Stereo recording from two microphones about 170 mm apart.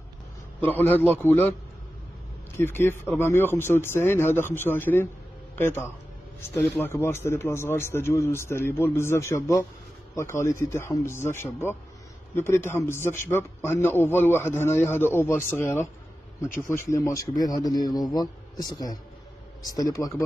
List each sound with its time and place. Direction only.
0.6 s a man's voice: 10° left (ahead or behind)
2.5 s a man's voice: 15° left (ahead or behind)